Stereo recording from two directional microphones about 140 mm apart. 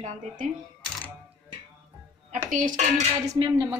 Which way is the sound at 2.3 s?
65° right (ahead or behind).